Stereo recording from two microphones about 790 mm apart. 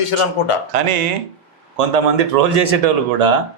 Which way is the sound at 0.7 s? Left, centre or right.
Right.